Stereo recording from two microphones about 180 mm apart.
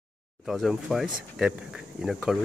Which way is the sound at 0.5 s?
Centre (ahead or behind).